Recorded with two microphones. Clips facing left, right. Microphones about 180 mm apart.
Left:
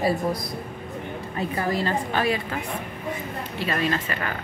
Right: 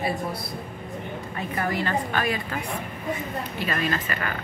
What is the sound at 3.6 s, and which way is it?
Speech, 30° left (ahead or behind).